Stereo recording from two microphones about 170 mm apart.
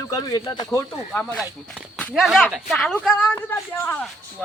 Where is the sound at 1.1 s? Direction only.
10° left (ahead or behind).